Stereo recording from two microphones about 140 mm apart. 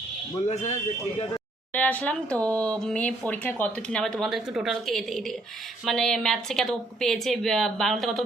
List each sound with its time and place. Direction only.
0.4 s a man's voice: 55° left (ahead or behind)
1.7 s speech: 10° left (ahead or behind)